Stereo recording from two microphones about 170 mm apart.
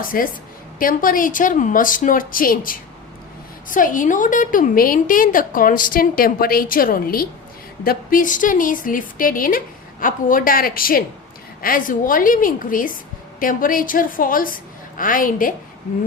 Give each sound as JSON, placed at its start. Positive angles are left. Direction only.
{"t": 0.0, "sound": "a woman's voice", "side_deg": 55}